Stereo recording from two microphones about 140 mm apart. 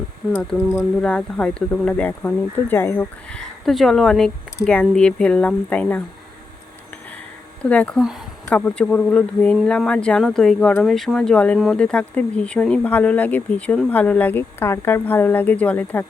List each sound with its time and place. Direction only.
0.5 s speech: centre (ahead or behind)
7.6 s speech: 10° left (ahead or behind)